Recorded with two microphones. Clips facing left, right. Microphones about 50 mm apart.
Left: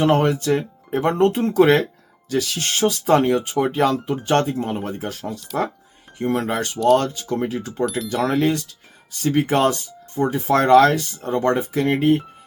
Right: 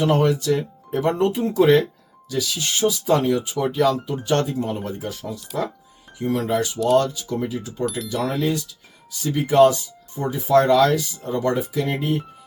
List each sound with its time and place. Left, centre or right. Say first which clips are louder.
0.0 s speech: left 1 dB; left
1.4 s speech: right 2 dB; left
7.9 s speech: left 1 dB; centre
8.3 s speech: left 4 dB; left